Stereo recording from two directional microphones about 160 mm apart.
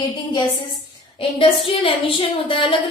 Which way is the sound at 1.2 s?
35° left (ahead or behind).